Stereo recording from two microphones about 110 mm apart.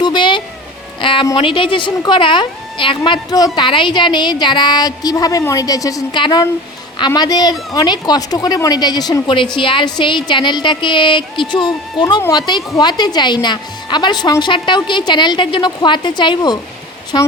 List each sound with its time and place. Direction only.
0.0 s a sound: 40° left (ahead or behind)
1.4 s a woman's voice: 50° left (ahead or behind); by 6.1 s 30° left (ahead or behind)
6.1 s a woman's voice: 45° left (ahead or behind)